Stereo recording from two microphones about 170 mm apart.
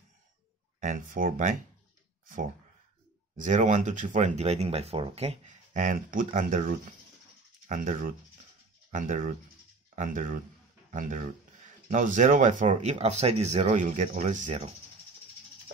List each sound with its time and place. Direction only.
0.7 s speech: 50° right (ahead or behind)
3.3 s speech: 45° right (ahead or behind)